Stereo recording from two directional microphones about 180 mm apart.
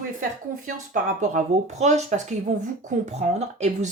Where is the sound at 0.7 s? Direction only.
45° right (ahead or behind).